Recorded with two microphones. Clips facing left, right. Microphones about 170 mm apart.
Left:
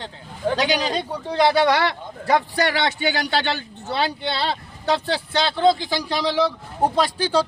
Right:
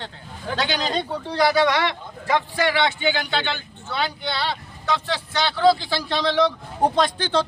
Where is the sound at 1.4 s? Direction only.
30° left (ahead or behind).